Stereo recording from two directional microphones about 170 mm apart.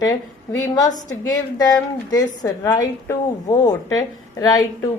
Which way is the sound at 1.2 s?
20° left (ahead or behind).